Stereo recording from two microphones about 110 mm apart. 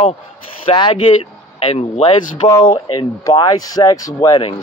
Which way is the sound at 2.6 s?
50° left (ahead or behind).